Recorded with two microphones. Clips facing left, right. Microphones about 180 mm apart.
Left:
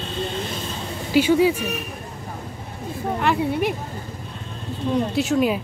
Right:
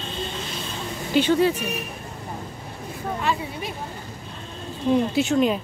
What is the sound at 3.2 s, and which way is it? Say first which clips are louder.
Speech: left 8 dB; 60° left (ahead or behind).